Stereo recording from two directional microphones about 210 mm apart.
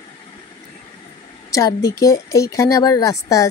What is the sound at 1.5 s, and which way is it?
A woman's voice, 15° left (ahead or behind).